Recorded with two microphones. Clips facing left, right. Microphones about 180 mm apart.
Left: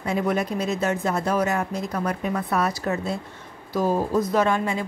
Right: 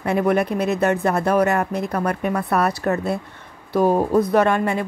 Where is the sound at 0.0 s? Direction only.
60° right (ahead or behind).